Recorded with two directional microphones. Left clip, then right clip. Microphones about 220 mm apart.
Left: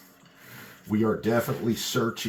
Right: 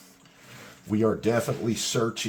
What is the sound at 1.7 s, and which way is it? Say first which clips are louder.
Speech: right 1 dB; 35° right (ahead or behind).